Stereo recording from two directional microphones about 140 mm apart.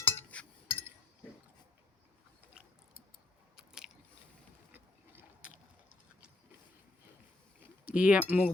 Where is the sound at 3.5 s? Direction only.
5° right (ahead or behind).